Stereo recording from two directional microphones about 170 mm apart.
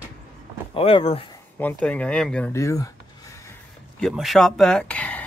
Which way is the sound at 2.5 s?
20° left (ahead or behind).